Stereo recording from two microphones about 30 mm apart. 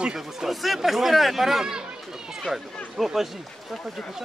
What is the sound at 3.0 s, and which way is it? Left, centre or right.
Speech, centre.